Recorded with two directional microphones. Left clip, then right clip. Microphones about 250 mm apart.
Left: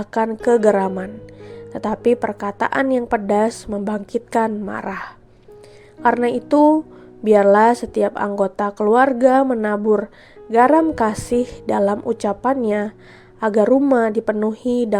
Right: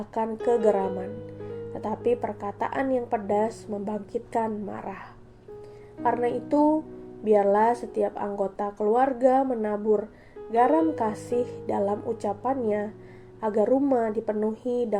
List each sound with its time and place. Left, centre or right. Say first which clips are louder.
0.0 s a woman's voice: left 8 dB; left